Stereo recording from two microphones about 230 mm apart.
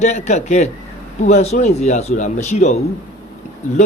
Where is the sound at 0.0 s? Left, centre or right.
Left.